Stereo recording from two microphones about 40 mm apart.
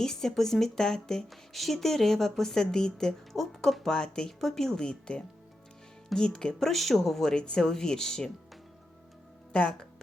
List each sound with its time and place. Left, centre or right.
0.0 s speech: centre
3.3 s speech: centre
3.8 s speech: centre
4.3 s speech: centre
6.6 s speech: centre
7.3 s speech: left
9.5 s speech: left